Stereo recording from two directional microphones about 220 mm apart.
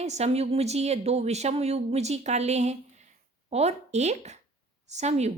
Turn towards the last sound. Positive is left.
turn(degrees=-30)  # may be behind; listen again after turning